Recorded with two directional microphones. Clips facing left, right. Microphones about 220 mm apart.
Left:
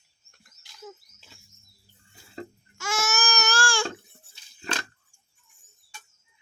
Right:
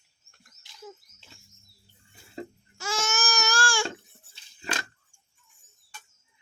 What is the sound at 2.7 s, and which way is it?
Baby cry, 30° right (ahead or behind).